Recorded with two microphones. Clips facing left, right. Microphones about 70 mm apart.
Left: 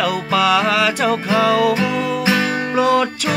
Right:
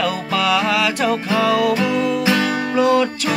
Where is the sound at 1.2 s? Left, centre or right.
Centre.